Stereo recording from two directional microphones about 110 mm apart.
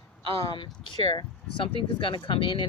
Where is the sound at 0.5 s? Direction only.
45° left (ahead or behind).